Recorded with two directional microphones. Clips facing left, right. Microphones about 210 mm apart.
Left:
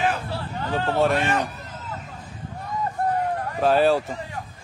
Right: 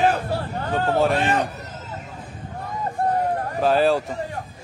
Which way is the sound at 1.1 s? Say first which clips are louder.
Right 2 dB; 30° right (ahead or behind).